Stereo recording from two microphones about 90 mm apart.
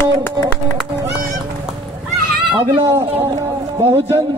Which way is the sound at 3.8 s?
90° right.